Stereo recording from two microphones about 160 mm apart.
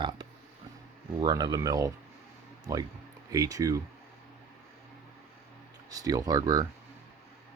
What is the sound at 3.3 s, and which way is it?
Speech, 20° right (ahead or behind).